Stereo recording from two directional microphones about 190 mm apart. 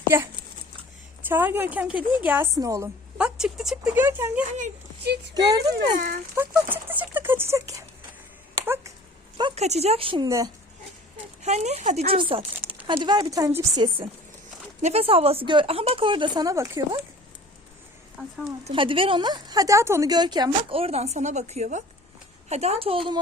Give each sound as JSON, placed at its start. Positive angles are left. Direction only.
{"t": 1.2, "sound": "speech", "side_deg": -10}
{"t": 4.4, "sound": "speech", "side_deg": -40}
{"t": 5.0, "sound": "speech", "side_deg": -60}
{"t": 5.3, "sound": "a woman's voice", "side_deg": -20}
{"t": 8.6, "sound": "a sound", "side_deg": -10}
{"t": 9.6, "sound": "a woman's voice", "side_deg": -35}
{"t": 11.4, "sound": "a woman's voice", "side_deg": -35}
{"t": 14.8, "sound": "a woman's voice", "side_deg": -35}
{"t": 18.6, "sound": "a woman's voice", "side_deg": -25}